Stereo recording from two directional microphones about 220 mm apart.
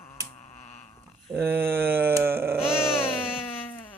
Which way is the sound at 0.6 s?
30° left (ahead or behind).